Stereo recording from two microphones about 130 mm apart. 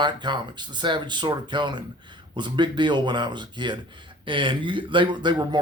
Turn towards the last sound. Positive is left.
turn(degrees=-35)  # may be behind; listen again after turning